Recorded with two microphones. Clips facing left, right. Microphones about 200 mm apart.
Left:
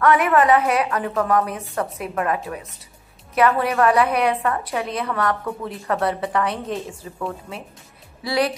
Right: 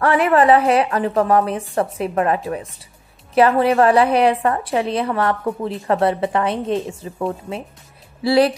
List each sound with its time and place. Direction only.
0.0 s a woman's voice: 30° right (ahead or behind)